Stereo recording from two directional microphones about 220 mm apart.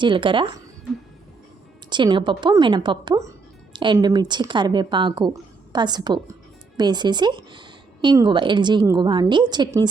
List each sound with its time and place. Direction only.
0.0 s speech: 20° right (ahead or behind)
1.9 s speech: 20° right (ahead or behind)